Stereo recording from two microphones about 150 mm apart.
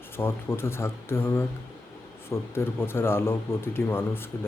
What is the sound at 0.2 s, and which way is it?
Speech, 15° left (ahead or behind).